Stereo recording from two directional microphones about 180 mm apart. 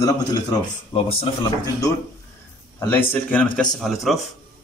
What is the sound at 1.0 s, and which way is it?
Speech, 30° left (ahead or behind).